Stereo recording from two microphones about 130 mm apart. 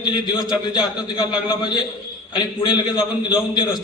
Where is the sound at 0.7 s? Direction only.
35° left (ahead or behind).